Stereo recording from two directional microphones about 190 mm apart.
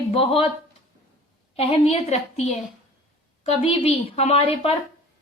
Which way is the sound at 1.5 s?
30° left (ahead or behind).